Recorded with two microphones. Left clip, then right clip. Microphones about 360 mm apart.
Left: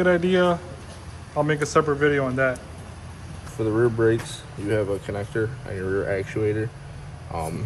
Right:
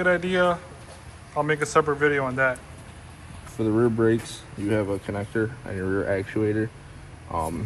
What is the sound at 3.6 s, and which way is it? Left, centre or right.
Speech, right.